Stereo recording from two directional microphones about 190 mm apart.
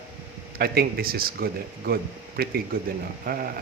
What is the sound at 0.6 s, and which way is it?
Speech, 55° right (ahead or behind).